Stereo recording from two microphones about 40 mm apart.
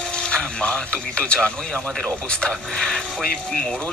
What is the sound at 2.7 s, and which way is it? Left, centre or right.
Speech, centre.